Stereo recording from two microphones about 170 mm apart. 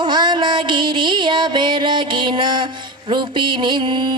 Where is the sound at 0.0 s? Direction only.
25° right (ahead or behind).